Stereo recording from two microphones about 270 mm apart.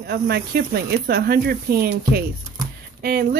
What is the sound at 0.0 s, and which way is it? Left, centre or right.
Speech, right.